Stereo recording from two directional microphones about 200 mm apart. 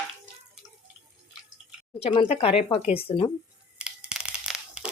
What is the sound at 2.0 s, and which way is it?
A woman's voice, 30° left (ahead or behind).